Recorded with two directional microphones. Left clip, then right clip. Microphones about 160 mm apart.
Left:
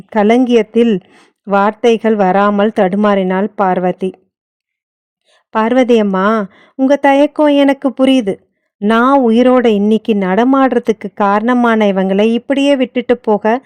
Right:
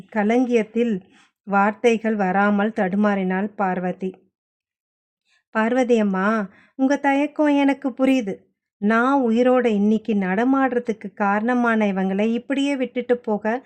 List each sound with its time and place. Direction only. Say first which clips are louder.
0.1 s speech: left 9 dB; 50° left (ahead or behind)
5.3 s speech: left 8 dB; 45° left (ahead or behind)